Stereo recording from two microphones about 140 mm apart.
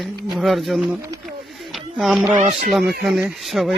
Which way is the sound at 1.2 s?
Centre (ahead or behind).